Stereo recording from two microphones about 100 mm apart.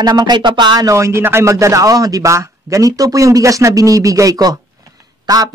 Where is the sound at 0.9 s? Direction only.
30° right (ahead or behind).